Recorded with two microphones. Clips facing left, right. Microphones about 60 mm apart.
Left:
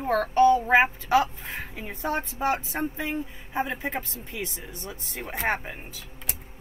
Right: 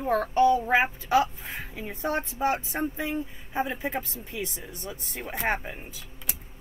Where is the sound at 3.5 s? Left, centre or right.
Centre.